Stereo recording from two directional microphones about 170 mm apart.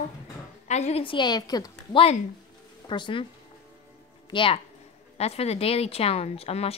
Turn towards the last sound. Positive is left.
turn(degrees=35)  # may be behind; listen again after turning